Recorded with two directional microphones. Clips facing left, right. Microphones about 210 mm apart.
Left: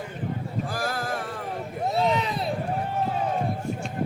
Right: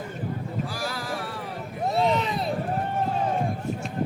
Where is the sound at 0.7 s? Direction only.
50° left (ahead or behind).